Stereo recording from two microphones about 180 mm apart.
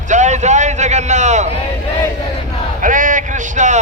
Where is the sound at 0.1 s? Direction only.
40° right (ahead or behind).